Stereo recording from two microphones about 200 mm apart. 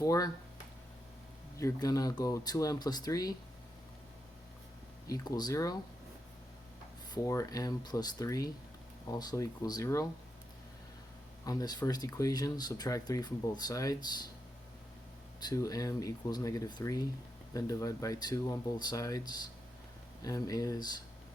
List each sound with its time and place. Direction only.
0.0 s speech: 15° left (ahead or behind)
1.5 s speech: 15° left (ahead or behind)
5.0 s speech: 15° left (ahead or behind)
7.1 s speech: 15° left (ahead or behind)
11.4 s speech: 20° left (ahead or behind)
15.4 s speech: 20° left (ahead or behind)